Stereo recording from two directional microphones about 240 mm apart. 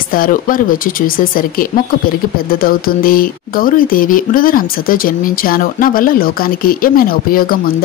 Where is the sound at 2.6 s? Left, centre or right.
Left.